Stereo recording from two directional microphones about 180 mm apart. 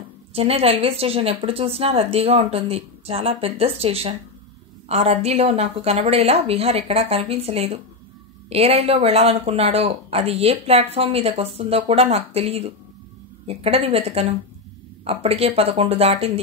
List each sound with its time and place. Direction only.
0.3 s speech: 35° right (ahead or behind)